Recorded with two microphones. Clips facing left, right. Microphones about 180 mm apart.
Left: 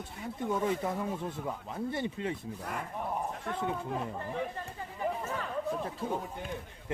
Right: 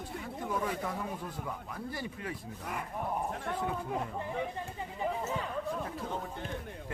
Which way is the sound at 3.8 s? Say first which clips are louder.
Even; 5° right (ahead or behind).